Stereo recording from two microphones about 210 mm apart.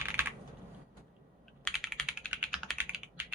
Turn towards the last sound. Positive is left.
turn(degrees=-5)  # may be behind; listen again after turning